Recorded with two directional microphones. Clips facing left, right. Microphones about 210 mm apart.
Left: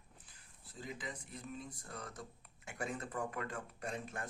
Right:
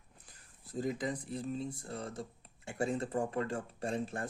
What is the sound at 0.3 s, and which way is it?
Speech, 45° right (ahead or behind).